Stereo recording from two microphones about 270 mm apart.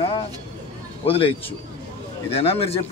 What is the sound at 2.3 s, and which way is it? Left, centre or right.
Speech, left.